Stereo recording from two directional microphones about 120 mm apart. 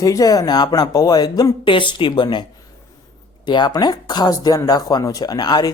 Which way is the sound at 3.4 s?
40° left (ahead or behind).